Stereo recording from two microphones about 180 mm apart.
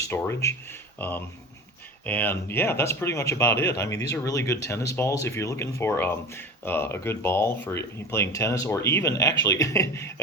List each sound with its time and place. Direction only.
0.1 s speech: 15° left (ahead or behind)